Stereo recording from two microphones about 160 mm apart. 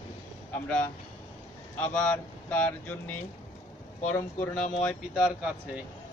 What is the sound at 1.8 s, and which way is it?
Speech, 5° left (ahead or behind).